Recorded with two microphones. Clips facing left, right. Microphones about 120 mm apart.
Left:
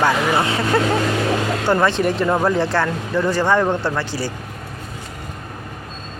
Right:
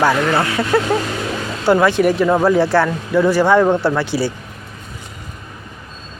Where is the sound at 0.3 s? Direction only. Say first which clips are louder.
Right 1 dB; 25° left (ahead or behind).